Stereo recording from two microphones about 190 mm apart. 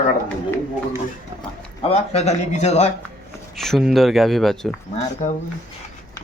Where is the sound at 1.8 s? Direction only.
35° left (ahead or behind).